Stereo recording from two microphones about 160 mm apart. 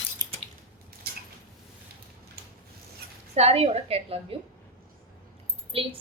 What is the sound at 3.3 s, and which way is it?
A woman's voice, 40° right (ahead or behind).